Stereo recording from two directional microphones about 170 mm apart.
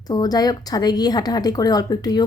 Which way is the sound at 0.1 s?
20° left (ahead or behind).